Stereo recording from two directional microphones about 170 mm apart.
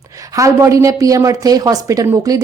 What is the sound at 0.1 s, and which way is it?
A woman's voice, 20° right (ahead or behind).